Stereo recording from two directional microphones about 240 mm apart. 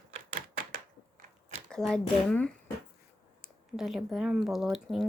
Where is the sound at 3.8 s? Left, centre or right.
Centre.